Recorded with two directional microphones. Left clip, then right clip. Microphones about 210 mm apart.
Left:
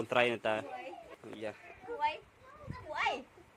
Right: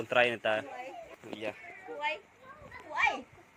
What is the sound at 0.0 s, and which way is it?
Speech, 20° left (ahead or behind).